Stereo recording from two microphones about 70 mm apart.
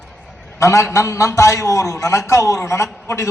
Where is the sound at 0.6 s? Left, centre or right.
Left.